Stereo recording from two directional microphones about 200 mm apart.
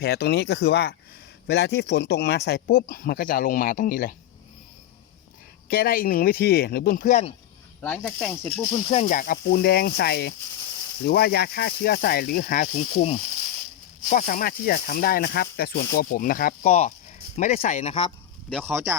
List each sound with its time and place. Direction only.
0.0 s speech: 55° left (ahead or behind)
5.6 s speech: 50° left (ahead or behind)
7.8 s speech: 5° left (ahead or behind)
8.9 s speech: 35° left (ahead or behind)
17.3 s speech: 35° left (ahead or behind)
18.7 s speech: 10° right (ahead or behind)